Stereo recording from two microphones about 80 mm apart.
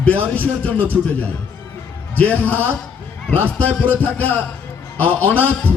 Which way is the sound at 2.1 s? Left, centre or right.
Left.